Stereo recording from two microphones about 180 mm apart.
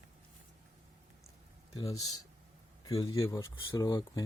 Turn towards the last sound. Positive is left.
turn(degrees=20)  # may be behind; listen again after turning